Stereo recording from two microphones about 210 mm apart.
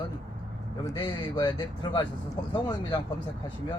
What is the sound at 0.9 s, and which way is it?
Speech, 20° left (ahead or behind).